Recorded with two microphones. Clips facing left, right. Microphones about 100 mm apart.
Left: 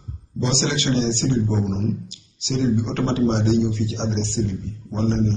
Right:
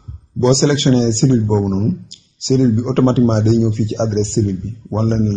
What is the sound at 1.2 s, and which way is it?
A man's voice, 40° right (ahead or behind).